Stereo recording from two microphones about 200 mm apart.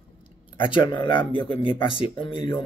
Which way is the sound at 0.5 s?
25° left (ahead or behind).